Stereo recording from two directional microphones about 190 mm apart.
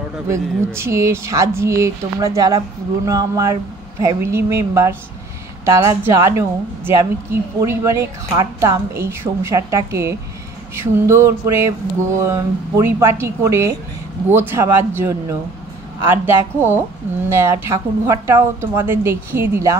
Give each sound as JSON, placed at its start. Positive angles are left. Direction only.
{"t": 0.7, "sound": "a woman's voice", "side_deg": -15}